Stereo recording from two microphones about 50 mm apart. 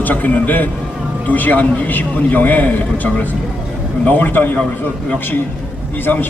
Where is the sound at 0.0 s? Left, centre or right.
Left.